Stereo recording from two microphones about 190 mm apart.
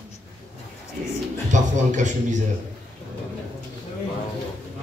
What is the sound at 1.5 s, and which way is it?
Speech, 40° right (ahead or behind).